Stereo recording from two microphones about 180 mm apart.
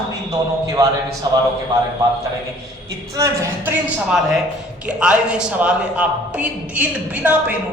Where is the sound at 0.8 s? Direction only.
20° right (ahead or behind).